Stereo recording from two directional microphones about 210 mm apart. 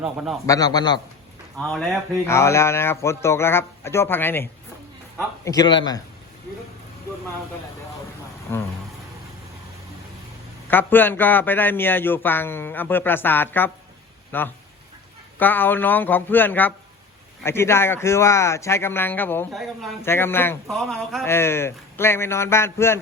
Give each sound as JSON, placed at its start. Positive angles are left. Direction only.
{"t": 0.0, "sound": "a man's voice", "side_deg": -5}
{"t": 0.4, "sound": "a man's voice", "side_deg": 15}
{"t": 1.5, "sound": "a man's voice", "side_deg": 0}
{"t": 2.2, "sound": "a man's voice", "side_deg": 15}
{"t": 10.7, "sound": "a man's voice", "side_deg": 10}
{"t": 19.5, "sound": "a man's voice", "side_deg": 0}
{"t": 20.1, "sound": "a man's voice", "side_deg": 10}
{"t": 21.2, "sound": "a man's voice", "side_deg": 10}